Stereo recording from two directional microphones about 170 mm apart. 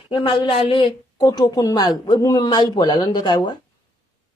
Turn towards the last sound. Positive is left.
turn(degrees=25)  # may be behind; listen again after turning